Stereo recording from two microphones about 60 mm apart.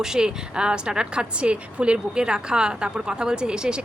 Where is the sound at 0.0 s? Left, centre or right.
Centre.